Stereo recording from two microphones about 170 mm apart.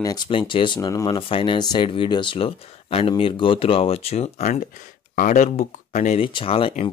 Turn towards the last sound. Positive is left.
turn(degrees=30)  # may be behind; listen again after turning